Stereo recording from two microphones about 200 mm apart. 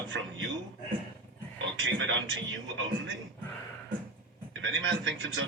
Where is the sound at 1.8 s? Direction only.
70° right (ahead or behind).